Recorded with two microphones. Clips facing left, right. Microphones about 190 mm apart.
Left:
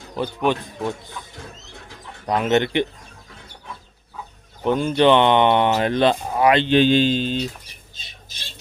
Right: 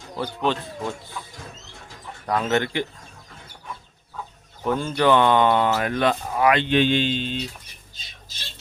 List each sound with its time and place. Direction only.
0.2 s speech: 15° left (ahead or behind)
2.2 s speech: 20° left (ahead or behind)
4.6 s speech: 15° left (ahead or behind); by 7.4 s 40° left (ahead or behind)